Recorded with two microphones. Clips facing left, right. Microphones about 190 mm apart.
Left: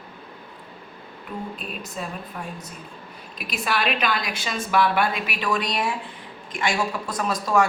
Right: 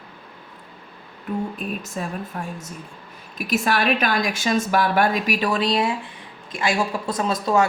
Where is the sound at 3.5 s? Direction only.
45° right (ahead or behind).